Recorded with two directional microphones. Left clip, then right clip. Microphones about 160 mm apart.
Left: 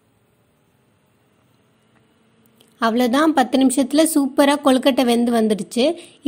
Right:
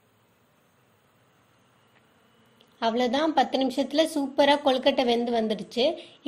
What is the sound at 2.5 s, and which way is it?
A woman's voice, 40° left (ahead or behind).